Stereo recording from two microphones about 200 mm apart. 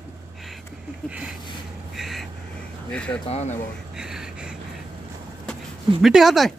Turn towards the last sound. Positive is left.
turn(degrees=0)  # may be behind; listen again after turning